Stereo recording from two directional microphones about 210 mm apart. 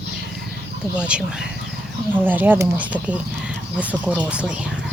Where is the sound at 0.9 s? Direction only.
5° right (ahead or behind).